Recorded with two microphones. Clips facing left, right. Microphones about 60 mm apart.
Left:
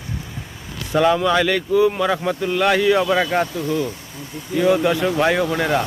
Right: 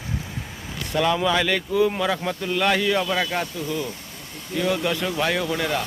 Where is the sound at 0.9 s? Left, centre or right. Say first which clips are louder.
Left 5 dB; centre.